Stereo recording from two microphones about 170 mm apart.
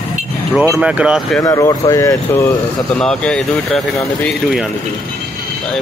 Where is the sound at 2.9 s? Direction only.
5° left (ahead or behind).